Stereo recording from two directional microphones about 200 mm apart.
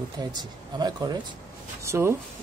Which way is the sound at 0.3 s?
20° right (ahead or behind).